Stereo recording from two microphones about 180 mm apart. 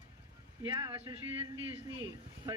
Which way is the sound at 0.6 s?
25° right (ahead or behind).